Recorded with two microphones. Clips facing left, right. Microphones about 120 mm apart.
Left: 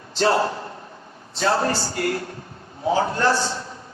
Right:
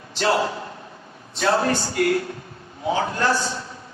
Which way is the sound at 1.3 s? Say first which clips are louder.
Right 1 dB; 35° left (ahead or behind).